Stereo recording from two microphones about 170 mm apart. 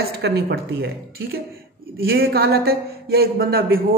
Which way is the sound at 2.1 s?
65° right (ahead or behind).